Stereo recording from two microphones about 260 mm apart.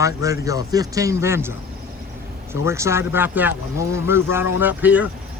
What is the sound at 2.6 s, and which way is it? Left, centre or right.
Speech, centre.